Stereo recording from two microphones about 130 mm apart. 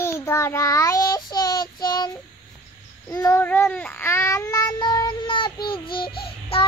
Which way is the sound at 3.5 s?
10° left (ahead or behind).